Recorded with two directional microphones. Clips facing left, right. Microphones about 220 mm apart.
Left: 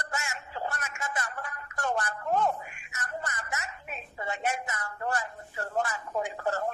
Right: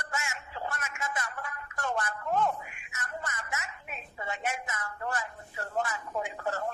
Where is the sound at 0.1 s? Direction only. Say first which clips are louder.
Right 1 dB; 40° left (ahead or behind).